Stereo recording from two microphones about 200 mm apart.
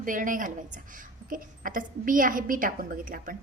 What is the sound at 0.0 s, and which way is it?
A woman's voice, 40° right (ahead or behind).